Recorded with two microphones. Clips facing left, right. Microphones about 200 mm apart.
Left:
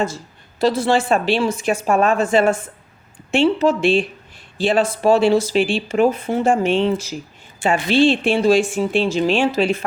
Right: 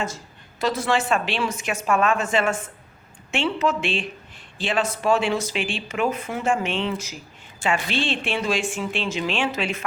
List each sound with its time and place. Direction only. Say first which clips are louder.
0.6 s speech: left 6 dB; 30° left (ahead or behind)